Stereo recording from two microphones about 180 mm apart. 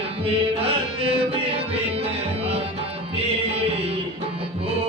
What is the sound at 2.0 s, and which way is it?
Music, 35° right (ahead or behind).